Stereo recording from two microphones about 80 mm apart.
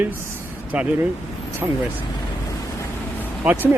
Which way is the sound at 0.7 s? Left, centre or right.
Centre.